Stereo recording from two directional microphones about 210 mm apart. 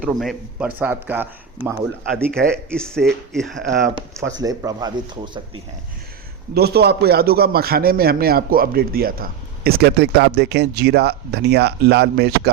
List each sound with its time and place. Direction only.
0.0 s speech: centre (ahead or behind)
2.3 s speech: 5° left (ahead or behind)
4.4 s speech: 15° right (ahead or behind)
6.5 s a man's voice: 50° right (ahead or behind)